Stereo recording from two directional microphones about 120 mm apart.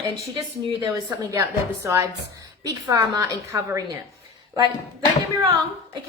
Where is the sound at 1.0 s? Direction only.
25° right (ahead or behind).